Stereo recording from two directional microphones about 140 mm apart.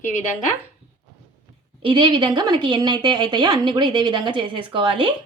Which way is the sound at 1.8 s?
35° right (ahead or behind).